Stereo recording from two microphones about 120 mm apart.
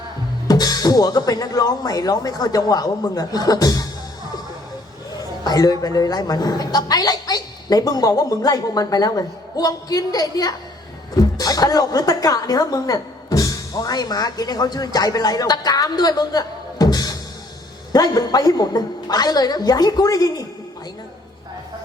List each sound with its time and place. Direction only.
0.4 s a woman's voice: 30° left (ahead or behind)
5.4 s a woman's voice: 30° left (ahead or behind)